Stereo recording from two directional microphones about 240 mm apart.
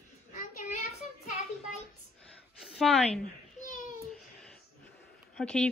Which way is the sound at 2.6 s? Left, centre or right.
Centre.